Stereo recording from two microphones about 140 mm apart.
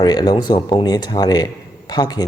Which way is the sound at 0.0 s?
30° left (ahead or behind).